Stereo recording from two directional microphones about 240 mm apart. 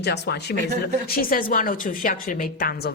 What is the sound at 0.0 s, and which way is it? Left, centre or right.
A woman's voice, left.